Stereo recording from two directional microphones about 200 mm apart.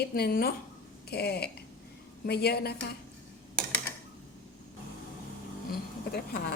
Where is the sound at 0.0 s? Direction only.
50° left (ahead or behind).